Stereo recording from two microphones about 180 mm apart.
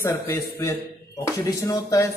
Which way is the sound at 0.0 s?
15° left (ahead or behind).